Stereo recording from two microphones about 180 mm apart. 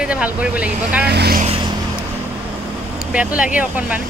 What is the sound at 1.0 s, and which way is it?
Speech, 65° right (ahead or behind).